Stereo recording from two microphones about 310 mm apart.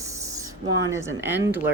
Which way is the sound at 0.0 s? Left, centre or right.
Centre.